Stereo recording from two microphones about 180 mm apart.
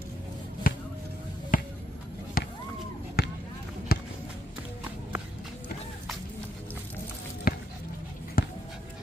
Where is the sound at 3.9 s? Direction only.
60° left (ahead or behind).